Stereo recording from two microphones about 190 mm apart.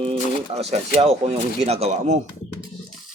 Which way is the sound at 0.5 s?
35° right (ahead or behind).